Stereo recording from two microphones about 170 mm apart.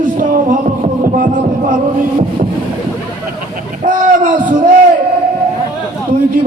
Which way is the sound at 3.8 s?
50° right (ahead or behind).